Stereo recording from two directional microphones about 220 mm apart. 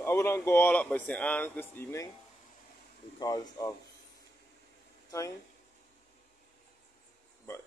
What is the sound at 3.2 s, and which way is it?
Speech, 15° left (ahead or behind).